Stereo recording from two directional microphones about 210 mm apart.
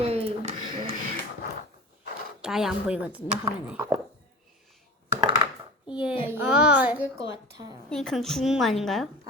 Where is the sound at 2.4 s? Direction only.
5° right (ahead or behind).